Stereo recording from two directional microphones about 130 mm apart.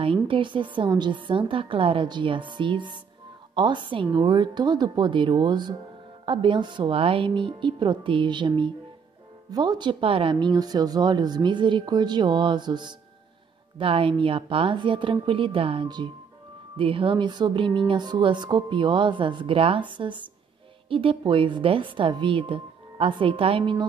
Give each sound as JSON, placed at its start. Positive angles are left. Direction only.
{"t": 0.0, "sound": "speech", "side_deg": -40}